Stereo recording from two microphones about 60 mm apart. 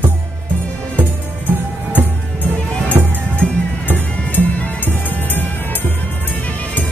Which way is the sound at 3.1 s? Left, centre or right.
Left.